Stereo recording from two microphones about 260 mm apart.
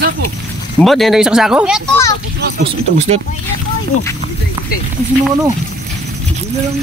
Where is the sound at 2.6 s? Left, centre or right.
Right.